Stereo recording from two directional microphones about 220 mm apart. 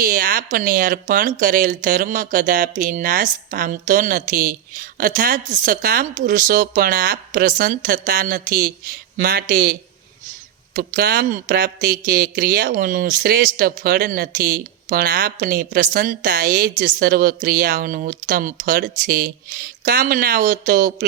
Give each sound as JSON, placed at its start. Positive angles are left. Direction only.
{"t": 0.0, "sound": "speech", "side_deg": -40}
{"t": 10.8, "sound": "speech", "side_deg": -45}